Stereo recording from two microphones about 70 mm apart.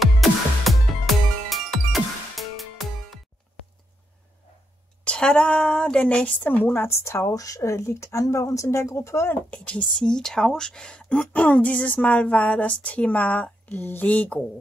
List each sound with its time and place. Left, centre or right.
0.0 s music: centre
5.0 s a woman's voice: centre
7.1 s speech: left
9.3 s a woman's voice: centre